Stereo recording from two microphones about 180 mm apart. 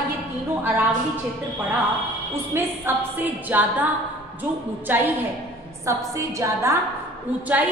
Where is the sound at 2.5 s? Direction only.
10° right (ahead or behind).